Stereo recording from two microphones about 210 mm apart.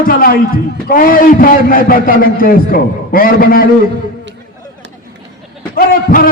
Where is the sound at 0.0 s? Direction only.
45° left (ahead or behind).